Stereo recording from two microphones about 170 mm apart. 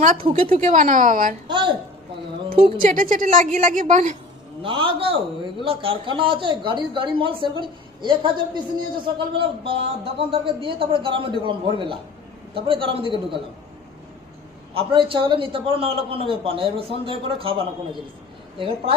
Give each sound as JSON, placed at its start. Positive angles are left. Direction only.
{"t": 0.0, "sound": "a woman's voice", "side_deg": -50}
{"t": 1.5, "sound": "a woman's voice", "side_deg": -25}
{"t": 2.8, "sound": "a woman's voice", "side_deg": -50}
{"t": 4.6, "sound": "a man's voice", "side_deg": -30}
{"t": 14.7, "sound": "a man's voice", "side_deg": -35}